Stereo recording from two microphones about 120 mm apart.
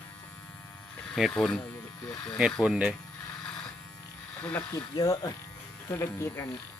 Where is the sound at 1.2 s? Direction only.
5° right (ahead or behind).